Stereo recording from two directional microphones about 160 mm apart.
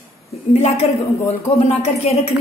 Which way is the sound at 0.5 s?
40° left (ahead or behind).